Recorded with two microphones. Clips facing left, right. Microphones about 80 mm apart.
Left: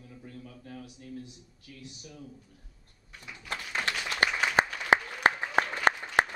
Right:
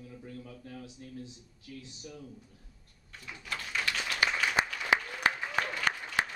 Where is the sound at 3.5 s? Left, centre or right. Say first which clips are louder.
Left 2 dB; left.